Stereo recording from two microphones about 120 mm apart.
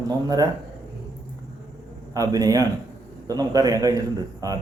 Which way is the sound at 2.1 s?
30° right (ahead or behind).